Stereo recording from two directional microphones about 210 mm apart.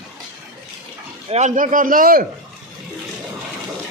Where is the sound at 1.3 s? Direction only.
35° right (ahead or behind).